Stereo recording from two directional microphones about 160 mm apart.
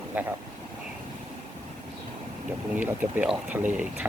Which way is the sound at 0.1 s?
10° right (ahead or behind).